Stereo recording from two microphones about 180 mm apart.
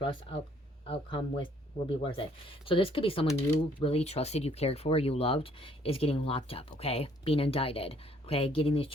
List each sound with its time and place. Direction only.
0.0 s speech: 30° left (ahead or behind)